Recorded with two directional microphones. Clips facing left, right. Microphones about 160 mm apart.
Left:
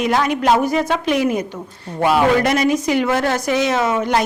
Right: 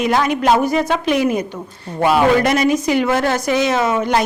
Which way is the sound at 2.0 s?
30° right (ahead or behind).